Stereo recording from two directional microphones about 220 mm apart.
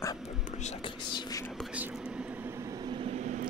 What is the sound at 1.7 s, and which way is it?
Vehicle, 5° right (ahead or behind).